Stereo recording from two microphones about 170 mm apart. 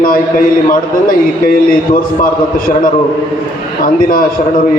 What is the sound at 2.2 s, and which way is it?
A man's voice, 55° left (ahead or behind).